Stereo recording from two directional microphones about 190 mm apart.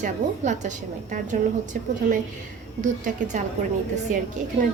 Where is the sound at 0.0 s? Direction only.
40° right (ahead or behind).